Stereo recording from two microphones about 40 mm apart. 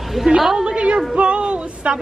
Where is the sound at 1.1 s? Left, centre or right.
Right.